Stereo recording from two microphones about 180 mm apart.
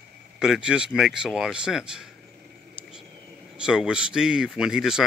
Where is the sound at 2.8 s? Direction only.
5° right (ahead or behind).